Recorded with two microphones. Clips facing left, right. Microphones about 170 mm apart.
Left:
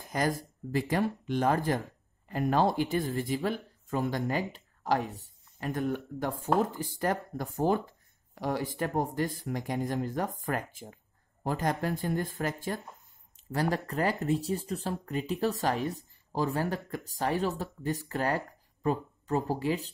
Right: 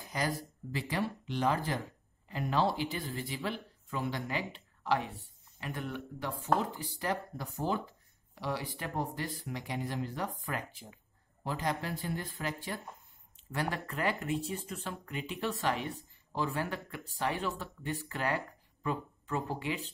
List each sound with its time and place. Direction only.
0.0 s speech: 50° left (ahead or behind)